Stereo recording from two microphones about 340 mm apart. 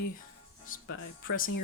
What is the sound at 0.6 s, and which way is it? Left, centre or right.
Speech, left.